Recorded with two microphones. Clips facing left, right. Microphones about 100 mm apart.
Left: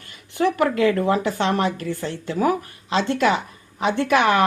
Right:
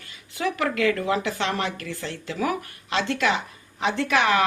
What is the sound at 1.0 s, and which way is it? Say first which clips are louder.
Speech: left 4 dB; 45° left (ahead or behind).